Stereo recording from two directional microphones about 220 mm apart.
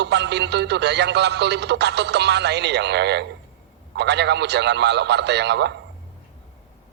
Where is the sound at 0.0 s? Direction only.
50° right (ahead or behind).